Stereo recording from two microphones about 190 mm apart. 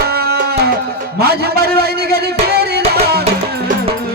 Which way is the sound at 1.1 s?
55° right (ahead or behind).